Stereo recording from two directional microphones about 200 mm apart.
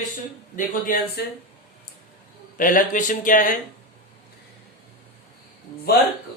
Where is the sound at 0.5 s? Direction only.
45° left (ahead or behind).